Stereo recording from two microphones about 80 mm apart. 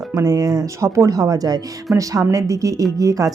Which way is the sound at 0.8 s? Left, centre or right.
Right.